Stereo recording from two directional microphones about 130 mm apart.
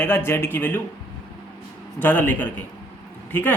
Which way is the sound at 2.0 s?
10° left (ahead or behind).